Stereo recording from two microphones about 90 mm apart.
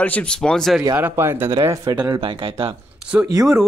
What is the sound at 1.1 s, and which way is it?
Speech, 25° right (ahead or behind).